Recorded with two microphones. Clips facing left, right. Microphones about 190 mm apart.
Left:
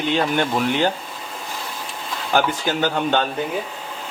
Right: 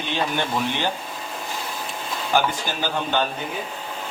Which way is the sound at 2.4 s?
60° left (ahead or behind).